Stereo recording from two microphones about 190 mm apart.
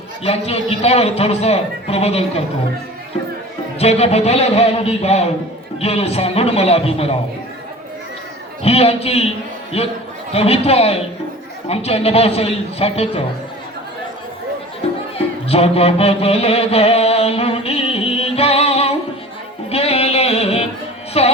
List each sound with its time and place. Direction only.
0.3 s a man's voice: 30° left (ahead or behind)
3.8 s a man's voice: 35° left (ahead or behind)
8.6 s a man's voice: 30° left (ahead or behind)
15.4 s mantra: 30° left (ahead or behind)
19.7 s music: 30° left (ahead or behind)